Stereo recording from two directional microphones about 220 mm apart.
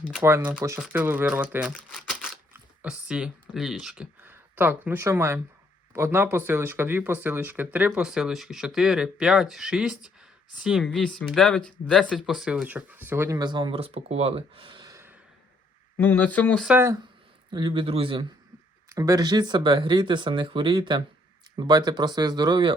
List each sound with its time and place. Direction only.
0.0 s speech: 5° right (ahead or behind)
16.0 s speech: 5° left (ahead or behind)
16.6 s speech: 10° right (ahead or behind)
17.5 s speech: 20° right (ahead or behind)